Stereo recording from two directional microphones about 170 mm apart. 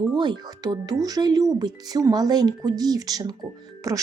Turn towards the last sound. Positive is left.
turn(degrees=-20)  # may be behind; listen again after turning